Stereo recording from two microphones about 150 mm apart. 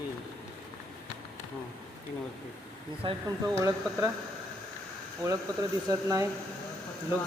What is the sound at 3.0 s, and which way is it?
Speech, 35° right (ahead or behind).